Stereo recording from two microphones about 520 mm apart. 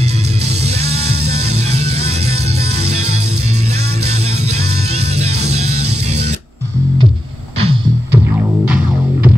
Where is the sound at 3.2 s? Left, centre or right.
Right.